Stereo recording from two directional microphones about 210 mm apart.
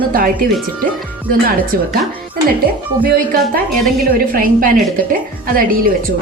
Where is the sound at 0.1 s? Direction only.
45° right (ahead or behind).